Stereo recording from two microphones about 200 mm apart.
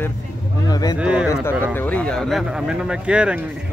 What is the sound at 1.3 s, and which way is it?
Speech, 10° left (ahead or behind).